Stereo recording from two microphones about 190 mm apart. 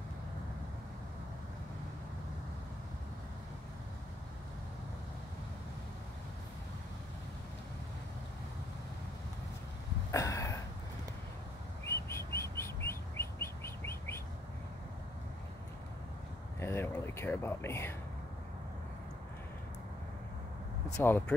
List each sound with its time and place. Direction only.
10.1 s a sound: 15° left (ahead or behind)
12.1 s chirp: 15° left (ahead or behind)
16.5 s speech: 10° left (ahead or behind)
20.9 s speech: 10° left (ahead or behind)